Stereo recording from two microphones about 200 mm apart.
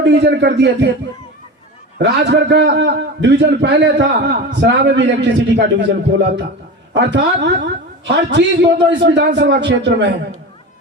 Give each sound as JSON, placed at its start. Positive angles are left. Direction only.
{"t": 0.0, "sound": "a man's voice", "side_deg": -55}
{"t": 2.0, "sound": "a man's voice", "side_deg": -60}